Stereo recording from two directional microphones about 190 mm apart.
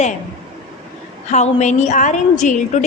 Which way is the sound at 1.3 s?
40° left (ahead or behind).